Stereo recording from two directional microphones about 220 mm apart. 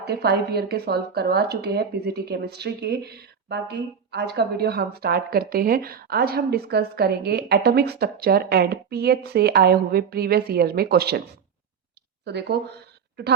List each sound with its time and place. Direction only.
0.0 s speech: 45° right (ahead or behind)
12.2 s speech: 50° right (ahead or behind)